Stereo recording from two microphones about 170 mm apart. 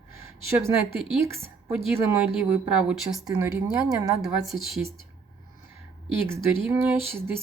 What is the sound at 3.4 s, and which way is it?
Speech, 15° right (ahead or behind).